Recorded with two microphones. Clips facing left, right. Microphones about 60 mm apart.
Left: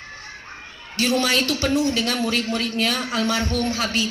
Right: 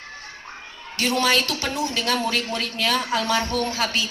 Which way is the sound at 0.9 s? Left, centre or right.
Right.